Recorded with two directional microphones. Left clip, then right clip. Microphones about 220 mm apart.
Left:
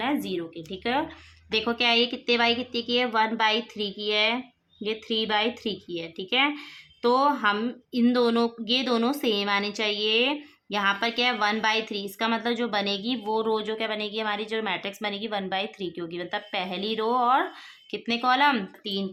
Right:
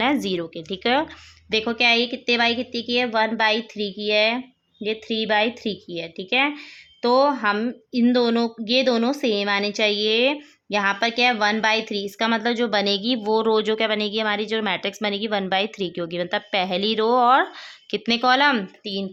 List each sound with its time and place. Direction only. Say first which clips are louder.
0.0 s speech: right 6 dB; 40° right (ahead or behind)
1.5 s a woman's voice: right 5 dB; 20° right (ahead or behind)